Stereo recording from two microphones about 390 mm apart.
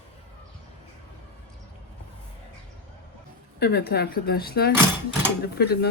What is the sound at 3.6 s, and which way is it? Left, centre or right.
Speech, left.